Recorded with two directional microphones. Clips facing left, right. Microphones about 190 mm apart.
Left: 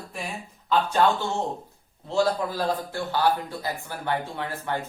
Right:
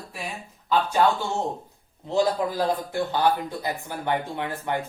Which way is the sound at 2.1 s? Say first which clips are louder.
Right 1 dB; 15° right (ahead or behind).